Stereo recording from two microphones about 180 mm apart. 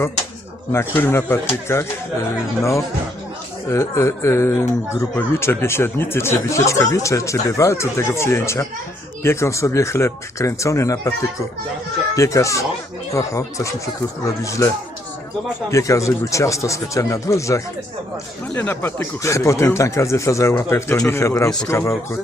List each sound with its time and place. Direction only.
0.7 s speech: 15° left (ahead or behind)
12.1 s speech: 20° left (ahead or behind)
15.7 s speech: 15° left (ahead or behind)